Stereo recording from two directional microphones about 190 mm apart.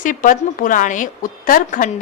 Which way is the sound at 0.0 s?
45° left (ahead or behind).